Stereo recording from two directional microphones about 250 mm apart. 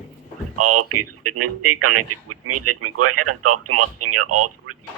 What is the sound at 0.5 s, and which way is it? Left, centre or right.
Speech, right.